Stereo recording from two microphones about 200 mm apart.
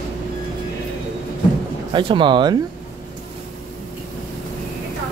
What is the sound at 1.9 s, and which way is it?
Speech, 25° right (ahead or behind).